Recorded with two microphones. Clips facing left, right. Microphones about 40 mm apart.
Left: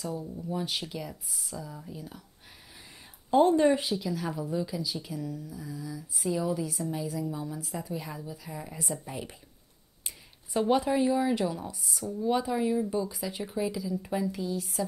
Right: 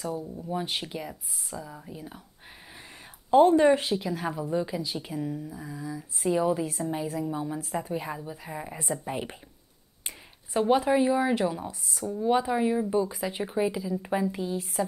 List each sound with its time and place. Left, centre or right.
0.5 s a woman's voice: right
3.4 s a woman's voice: right
10.6 s a woman's voice: centre; by 14.7 s right